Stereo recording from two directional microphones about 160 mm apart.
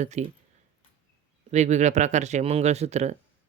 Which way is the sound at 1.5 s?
45° right (ahead or behind).